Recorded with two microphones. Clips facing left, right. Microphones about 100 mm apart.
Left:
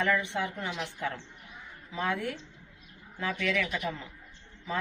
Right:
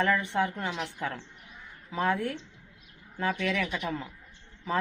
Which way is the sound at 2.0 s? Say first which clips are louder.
Right 3 dB; 40° right (ahead or behind).